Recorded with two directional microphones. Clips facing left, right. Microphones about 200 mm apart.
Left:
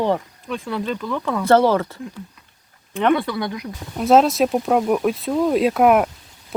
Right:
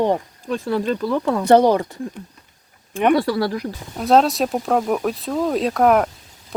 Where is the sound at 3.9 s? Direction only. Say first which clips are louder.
Left 1 dB; centre (ahead or behind).